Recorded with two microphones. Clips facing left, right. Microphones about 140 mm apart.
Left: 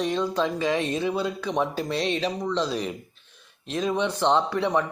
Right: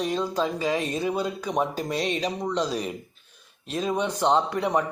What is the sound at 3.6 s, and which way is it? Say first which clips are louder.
Speech: left 1 dB; 35° right (ahead or behind).